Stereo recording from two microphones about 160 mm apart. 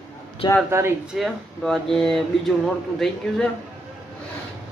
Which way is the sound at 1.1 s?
Centre (ahead or behind).